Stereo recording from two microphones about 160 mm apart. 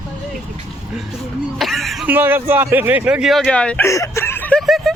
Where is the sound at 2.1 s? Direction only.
15° right (ahead or behind); by 3.9 s 5° left (ahead or behind).